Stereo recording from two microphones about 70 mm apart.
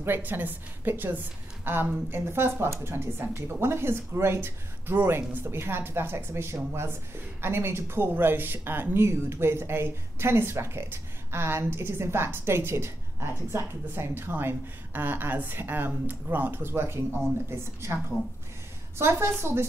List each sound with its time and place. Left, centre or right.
0.0 s a woman's voice: right
18.9 s a woman's voice: right